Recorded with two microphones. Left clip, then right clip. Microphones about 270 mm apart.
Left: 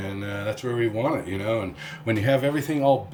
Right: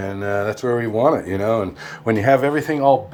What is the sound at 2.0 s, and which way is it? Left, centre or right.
Speech, right.